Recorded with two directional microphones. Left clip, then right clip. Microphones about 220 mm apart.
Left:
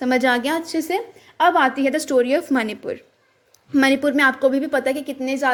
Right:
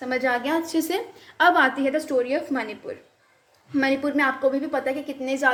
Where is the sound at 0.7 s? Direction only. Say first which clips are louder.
Left 2 dB; 20° left (ahead or behind).